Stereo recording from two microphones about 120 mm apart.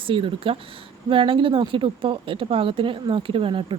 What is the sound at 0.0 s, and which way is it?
Speech, 45° right (ahead or behind).